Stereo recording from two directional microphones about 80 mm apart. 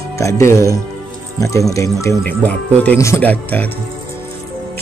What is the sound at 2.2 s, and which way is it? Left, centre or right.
Speech, centre.